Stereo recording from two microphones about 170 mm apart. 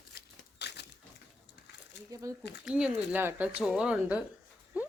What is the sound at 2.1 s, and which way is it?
Speech, 20° right (ahead or behind).